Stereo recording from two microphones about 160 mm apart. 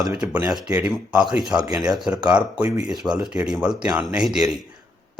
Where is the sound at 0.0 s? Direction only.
5° right (ahead or behind).